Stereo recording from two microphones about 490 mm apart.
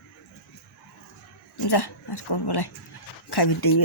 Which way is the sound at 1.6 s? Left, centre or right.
Left.